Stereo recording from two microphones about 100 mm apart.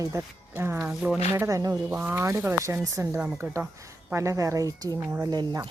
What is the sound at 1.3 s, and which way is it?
Speech, 30° right (ahead or behind).